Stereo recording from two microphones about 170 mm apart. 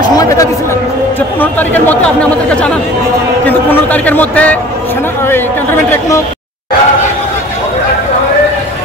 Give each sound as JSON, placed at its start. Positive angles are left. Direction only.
{"t": 0.0, "sound": "a sound", "side_deg": 20}
{"t": 1.4, "sound": "a man's voice", "side_deg": 10}
{"t": 5.9, "sound": "a man's voice", "side_deg": 15}